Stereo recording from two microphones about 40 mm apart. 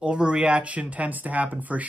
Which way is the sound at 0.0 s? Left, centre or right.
Right.